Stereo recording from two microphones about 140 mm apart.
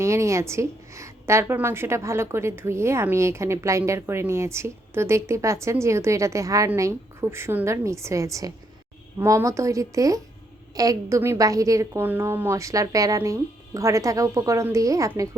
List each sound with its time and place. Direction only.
0.0 s a woman's voice: 20° right (ahead or behind)